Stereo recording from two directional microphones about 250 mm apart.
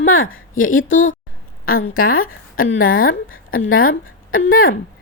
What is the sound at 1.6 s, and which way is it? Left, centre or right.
A woman's voice, left.